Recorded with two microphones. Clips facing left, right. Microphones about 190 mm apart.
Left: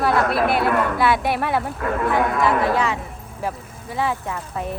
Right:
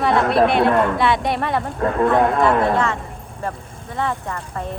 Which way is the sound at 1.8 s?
30° right (ahead or behind).